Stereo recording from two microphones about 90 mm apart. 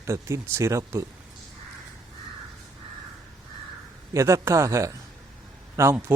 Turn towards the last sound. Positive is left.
turn(degrees=-30)  # may be behind; listen again after turning